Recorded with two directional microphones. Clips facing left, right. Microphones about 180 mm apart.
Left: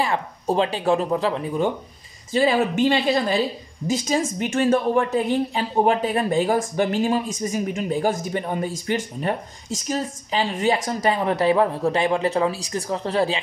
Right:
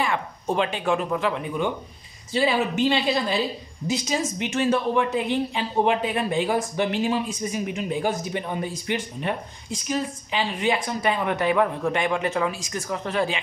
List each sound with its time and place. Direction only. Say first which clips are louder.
0.0 s speech: left 2 dB; 35° left (ahead or behind)
2.3 s speech: left 3 dB; 45° left (ahead or behind)